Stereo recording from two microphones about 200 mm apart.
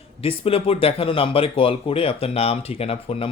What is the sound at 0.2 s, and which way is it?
A man's voice, 30° left (ahead or behind).